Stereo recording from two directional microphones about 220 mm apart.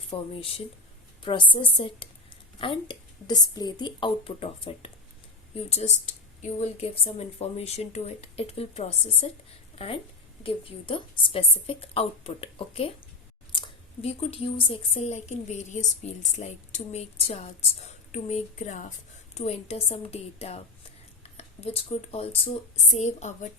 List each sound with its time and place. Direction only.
0.1 s a woman's voice: 25° left (ahead or behind)